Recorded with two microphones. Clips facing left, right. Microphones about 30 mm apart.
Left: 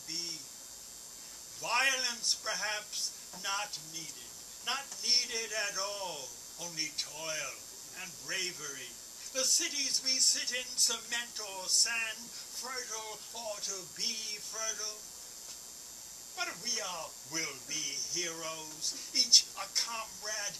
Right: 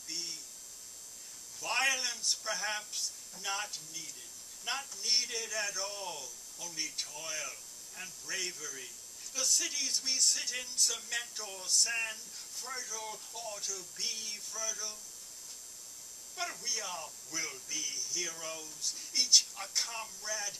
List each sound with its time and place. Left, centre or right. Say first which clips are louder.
0.1 s a sound: even; centre
1.6 s a man's voice: left 1 dB; centre
11.6 s a man's voice: even; centre
11.9 s a man's voice: even; centre
12.7 s a man's voice: right 2 dB; centre
16.3 s a man's voice: even; centre